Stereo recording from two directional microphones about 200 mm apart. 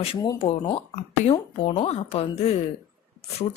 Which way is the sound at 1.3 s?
30° left (ahead or behind).